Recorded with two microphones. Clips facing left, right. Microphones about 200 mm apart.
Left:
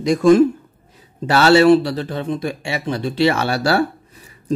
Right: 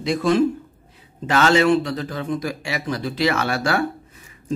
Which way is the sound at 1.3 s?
35° left (ahead or behind).